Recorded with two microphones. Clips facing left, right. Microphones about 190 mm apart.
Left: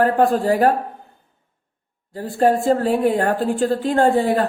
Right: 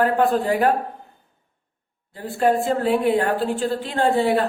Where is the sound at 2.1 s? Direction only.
40° left (ahead or behind).